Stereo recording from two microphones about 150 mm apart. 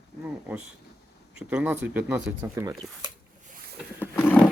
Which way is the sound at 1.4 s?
10° right (ahead or behind).